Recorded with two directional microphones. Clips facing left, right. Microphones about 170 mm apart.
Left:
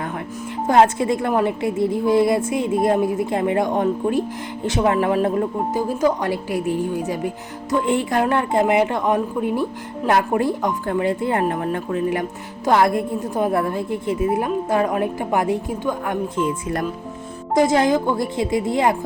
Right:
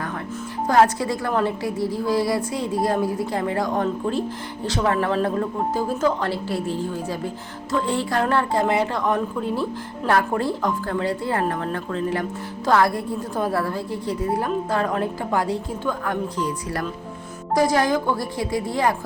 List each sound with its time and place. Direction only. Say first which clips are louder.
0.7 s a woman's voice: left 3 dB; 20° left (ahead or behind)